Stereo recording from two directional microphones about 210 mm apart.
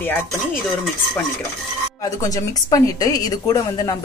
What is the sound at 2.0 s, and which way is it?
A woman's voice, 15° left (ahead or behind).